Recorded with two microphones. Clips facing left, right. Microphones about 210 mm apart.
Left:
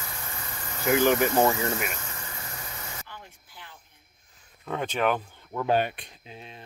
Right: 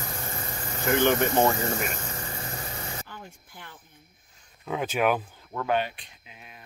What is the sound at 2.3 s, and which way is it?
Vehicle, 35° right (ahead or behind).